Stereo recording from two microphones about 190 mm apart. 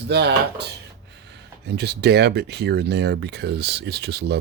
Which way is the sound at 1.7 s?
60° right (ahead or behind).